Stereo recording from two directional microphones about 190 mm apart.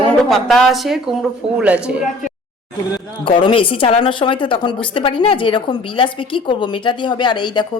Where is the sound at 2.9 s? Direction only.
25° left (ahead or behind).